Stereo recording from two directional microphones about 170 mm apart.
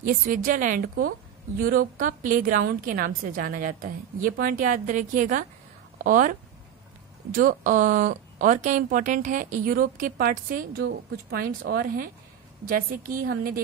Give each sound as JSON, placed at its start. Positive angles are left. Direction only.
{"t": 0.0, "sound": "a woman's voice", "side_deg": -55}
{"t": 7.3, "sound": "a woman's voice", "side_deg": -50}